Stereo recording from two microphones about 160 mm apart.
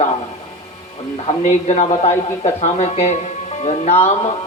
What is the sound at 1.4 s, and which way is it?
Speech, 45° left (ahead or behind).